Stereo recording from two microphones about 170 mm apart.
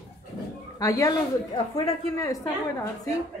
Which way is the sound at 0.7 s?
20° left (ahead or behind).